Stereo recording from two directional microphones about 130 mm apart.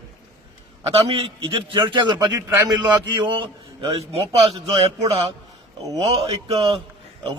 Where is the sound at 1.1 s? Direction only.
40° right (ahead or behind).